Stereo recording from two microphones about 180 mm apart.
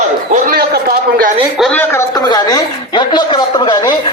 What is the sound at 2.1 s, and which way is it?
A man's voice, 20° left (ahead or behind).